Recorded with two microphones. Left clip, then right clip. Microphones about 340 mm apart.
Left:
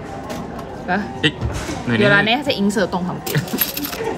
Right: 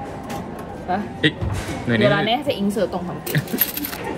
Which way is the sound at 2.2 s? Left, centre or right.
Left.